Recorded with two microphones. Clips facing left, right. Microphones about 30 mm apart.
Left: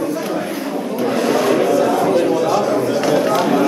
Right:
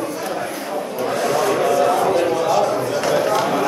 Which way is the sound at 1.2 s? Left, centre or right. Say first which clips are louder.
Left 3 dB; centre.